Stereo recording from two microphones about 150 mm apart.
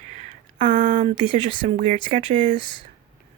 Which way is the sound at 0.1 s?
55° right (ahead or behind).